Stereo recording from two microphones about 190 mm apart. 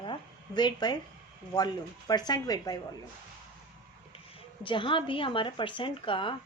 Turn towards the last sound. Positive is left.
turn(degrees=25)  # may be behind; listen again after turning